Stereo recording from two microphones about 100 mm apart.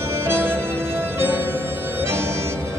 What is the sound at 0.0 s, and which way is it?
Music, 25° right (ahead or behind).